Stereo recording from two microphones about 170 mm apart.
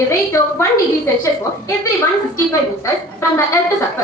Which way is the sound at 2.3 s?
20° left (ahead or behind).